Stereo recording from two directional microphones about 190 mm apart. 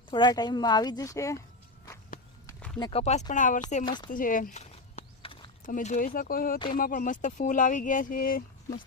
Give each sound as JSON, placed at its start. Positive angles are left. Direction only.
{"t": 0.1, "sound": "speech", "side_deg": 25}
{"t": 2.5, "sound": "a sound", "side_deg": 5}
{"t": 2.7, "sound": "speech", "side_deg": 25}
{"t": 3.0, "sound": "speech", "side_deg": 35}
{"t": 3.8, "sound": "speech", "side_deg": 25}
{"t": 4.1, "sound": "a sound", "side_deg": 45}
{"t": 5.6, "sound": "speech", "side_deg": 40}